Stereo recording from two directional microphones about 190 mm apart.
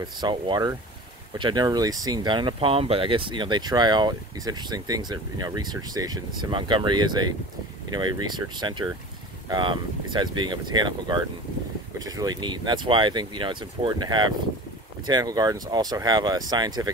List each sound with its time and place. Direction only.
0.0 s speech: 25° right (ahead or behind)